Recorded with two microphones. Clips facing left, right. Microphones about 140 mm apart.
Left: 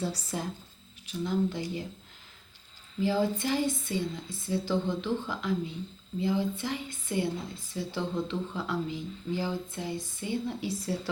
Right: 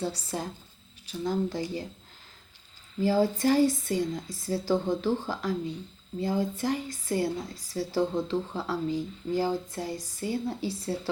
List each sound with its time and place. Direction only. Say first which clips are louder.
0.0 s speech: right 1 dB; 30° right (ahead or behind)
3.0 s speech: right 3 dB; 40° right (ahead or behind)